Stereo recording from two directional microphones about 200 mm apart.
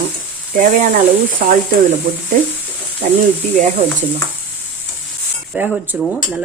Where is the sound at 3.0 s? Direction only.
40° right (ahead or behind).